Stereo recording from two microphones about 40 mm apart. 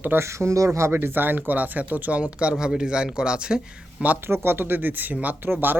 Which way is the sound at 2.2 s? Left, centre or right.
Right.